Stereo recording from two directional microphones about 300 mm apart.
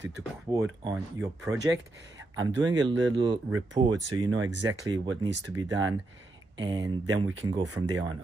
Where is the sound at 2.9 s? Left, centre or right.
Right.